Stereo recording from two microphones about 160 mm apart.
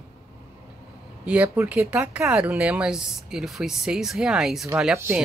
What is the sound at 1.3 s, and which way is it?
Speech, 10° right (ahead or behind).